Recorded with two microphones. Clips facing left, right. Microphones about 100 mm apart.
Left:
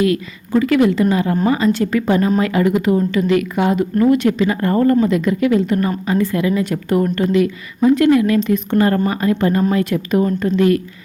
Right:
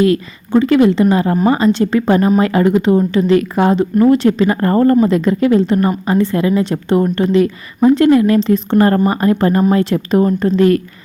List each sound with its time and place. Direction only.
0.0 s a woman's voice: 30° right (ahead or behind)